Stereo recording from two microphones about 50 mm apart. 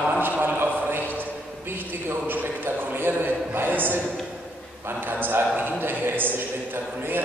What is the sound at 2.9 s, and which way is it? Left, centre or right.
A man's voice, right.